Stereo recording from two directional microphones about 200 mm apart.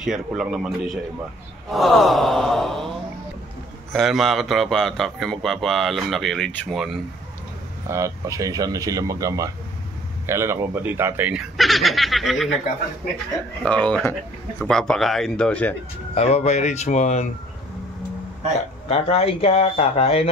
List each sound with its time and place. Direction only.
0.0 s speech: 5° right (ahead or behind)
3.9 s speech: centre (ahead or behind)
7.9 s speech: 15° right (ahead or behind); by 12.4 s centre (ahead or behind)
13.7 s speech: 5° left (ahead or behind)
16.2 s speech: 35° left (ahead or behind)
18.9 s speech: 30° left (ahead or behind)